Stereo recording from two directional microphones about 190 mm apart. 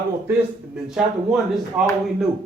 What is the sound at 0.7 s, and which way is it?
Speech, centre (ahead or behind).